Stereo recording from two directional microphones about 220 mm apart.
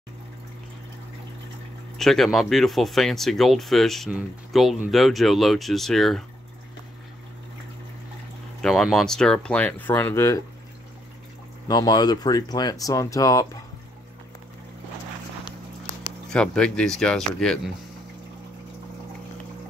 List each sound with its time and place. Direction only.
2.0 s speech: centre (ahead or behind)
8.6 s speech: centre (ahead or behind)
11.6 s speech: 20° left (ahead or behind)
16.3 s speech: 5° left (ahead or behind)